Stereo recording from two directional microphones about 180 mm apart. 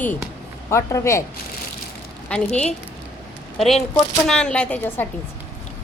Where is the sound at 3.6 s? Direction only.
Centre (ahead or behind).